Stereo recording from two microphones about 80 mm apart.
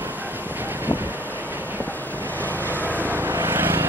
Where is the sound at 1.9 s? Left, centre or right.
Left.